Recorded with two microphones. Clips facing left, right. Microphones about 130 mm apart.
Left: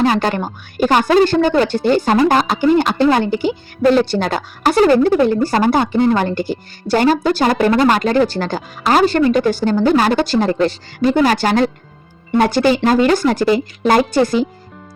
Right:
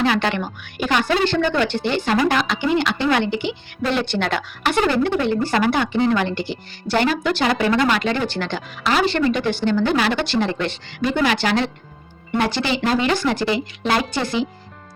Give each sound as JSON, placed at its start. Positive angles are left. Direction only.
{"t": 0.0, "sound": "a woman's voice", "side_deg": 40}